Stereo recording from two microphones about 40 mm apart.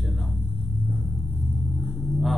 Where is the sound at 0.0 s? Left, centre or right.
Centre.